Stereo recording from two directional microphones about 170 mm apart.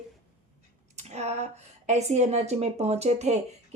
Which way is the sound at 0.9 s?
40° right (ahead or behind).